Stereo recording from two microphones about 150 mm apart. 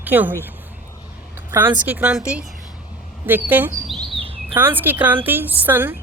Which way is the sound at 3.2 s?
15° right (ahead or behind).